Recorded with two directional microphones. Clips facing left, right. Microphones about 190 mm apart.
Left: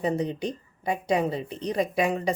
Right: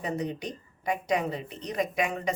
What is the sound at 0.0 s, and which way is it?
Speech, 30° left (ahead or behind).